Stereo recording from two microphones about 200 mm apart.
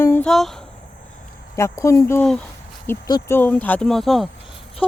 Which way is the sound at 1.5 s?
15° left (ahead or behind).